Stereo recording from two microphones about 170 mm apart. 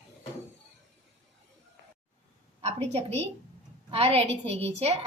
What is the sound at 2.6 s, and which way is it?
A woman's voice, 40° right (ahead or behind).